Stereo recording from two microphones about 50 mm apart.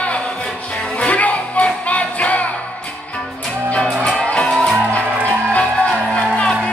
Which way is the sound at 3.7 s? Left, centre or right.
Centre.